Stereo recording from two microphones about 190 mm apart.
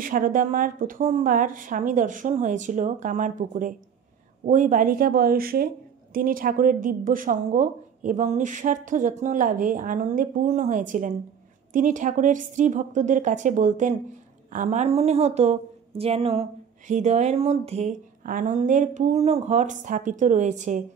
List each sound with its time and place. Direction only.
0.0 s a woman's voice: 45° right (ahead or behind)